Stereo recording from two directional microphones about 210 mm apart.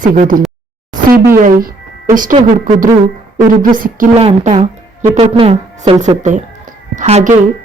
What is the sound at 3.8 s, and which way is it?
Speech, 40° right (ahead or behind).